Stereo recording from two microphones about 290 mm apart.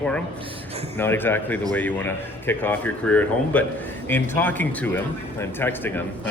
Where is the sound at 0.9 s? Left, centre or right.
Centre.